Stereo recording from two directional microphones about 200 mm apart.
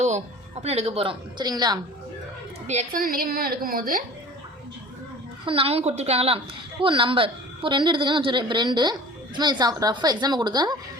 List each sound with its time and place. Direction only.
0.0 s a woman's voice: 35° right (ahead or behind)
2.6 s a woman's voice: 40° right (ahead or behind)
5.5 s a woman's voice: 30° right (ahead or behind)